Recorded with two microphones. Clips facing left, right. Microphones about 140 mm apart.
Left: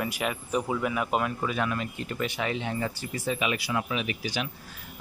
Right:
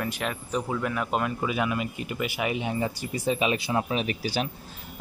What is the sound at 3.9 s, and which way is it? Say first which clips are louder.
Speech: right 3 dB; 35° right (ahead or behind).